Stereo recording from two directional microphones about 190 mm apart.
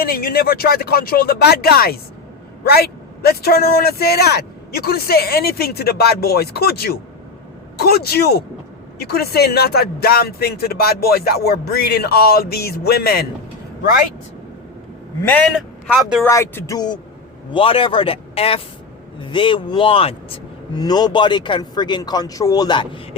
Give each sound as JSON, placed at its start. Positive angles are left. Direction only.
{"t": 0.0, "sound": "speech", "side_deg": 50}
{"t": 15.9, "sound": "speech", "side_deg": 0}
{"t": 16.2, "sound": "speech", "side_deg": 15}